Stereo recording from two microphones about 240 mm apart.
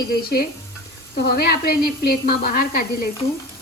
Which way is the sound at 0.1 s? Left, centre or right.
Left.